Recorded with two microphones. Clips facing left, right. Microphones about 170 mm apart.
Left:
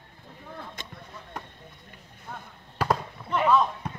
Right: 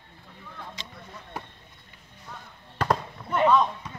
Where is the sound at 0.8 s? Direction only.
50° left (ahead or behind).